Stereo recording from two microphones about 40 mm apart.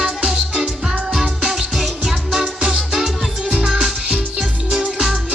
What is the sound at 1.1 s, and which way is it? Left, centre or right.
Music, centre.